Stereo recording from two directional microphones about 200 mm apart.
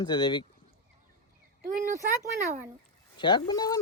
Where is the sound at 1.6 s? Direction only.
40° right (ahead or behind).